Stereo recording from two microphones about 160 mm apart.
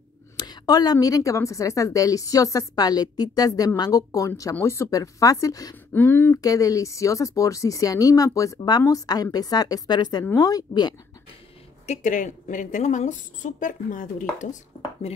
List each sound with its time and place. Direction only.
0.5 s a woman's voice: 25° left (ahead or behind)
5.9 s a woman's voice: 10° left (ahead or behind)
11.8 s a woman's voice: 50° left (ahead or behind)